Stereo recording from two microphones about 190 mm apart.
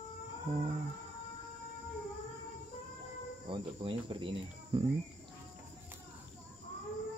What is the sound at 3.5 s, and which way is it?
Cricket, 25° right (ahead or behind).